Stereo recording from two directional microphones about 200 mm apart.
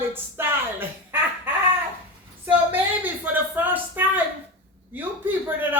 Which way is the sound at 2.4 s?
10° right (ahead or behind).